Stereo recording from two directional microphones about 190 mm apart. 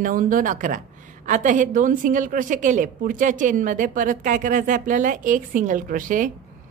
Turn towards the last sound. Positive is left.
turn(degrees=-45)  # may be behind; listen again after turning